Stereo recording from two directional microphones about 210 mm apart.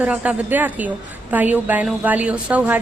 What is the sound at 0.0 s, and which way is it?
A woman's voice, 5° right (ahead or behind).